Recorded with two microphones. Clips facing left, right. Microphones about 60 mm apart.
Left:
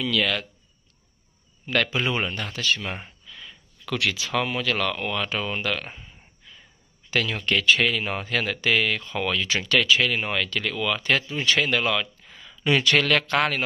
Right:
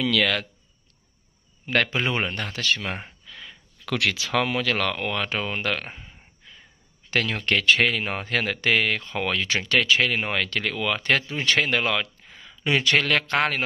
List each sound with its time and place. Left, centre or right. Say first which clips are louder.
0.0 s speech: right 2 dB; right
1.7 s speech: right 1 dB; right
4.6 s speech: right 1 dB; right
5.9 s a sound: right 1 dB; right
6.4 s whispering: even; right
7.1 s speech: right 1 dB; right
9.6 s speech: even; right
12.3 s speech: left 3 dB; right